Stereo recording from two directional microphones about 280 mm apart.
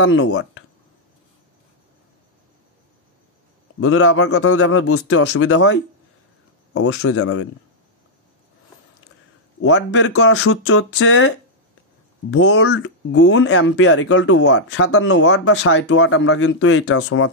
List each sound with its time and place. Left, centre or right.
0.0 s speech: left
3.8 s speech: left
9.6 s speech: left